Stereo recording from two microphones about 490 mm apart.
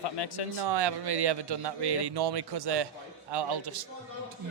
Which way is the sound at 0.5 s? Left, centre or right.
Right.